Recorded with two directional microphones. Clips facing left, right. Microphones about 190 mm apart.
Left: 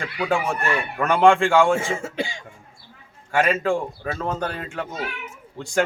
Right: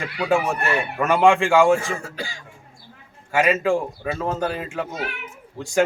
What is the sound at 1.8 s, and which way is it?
Speech, 25° left (ahead or behind).